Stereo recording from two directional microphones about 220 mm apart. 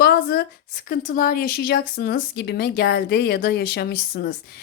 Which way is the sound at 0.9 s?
40° left (ahead or behind).